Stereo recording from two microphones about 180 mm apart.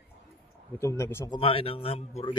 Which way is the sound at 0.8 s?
15° left (ahead or behind).